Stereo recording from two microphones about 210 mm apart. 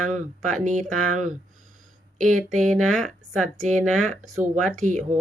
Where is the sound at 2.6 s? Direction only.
5° left (ahead or behind).